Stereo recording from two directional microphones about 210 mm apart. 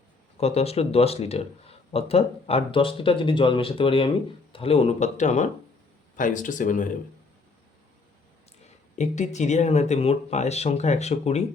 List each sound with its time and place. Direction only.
0.3 s speech: 30° left (ahead or behind)
9.0 s speech: 35° left (ahead or behind)